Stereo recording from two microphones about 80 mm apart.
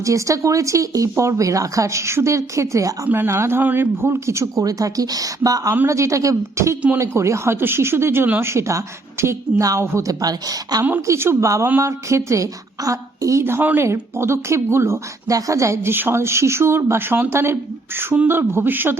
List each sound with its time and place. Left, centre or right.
0.0 s a woman's voice: right
11.0 s speech: right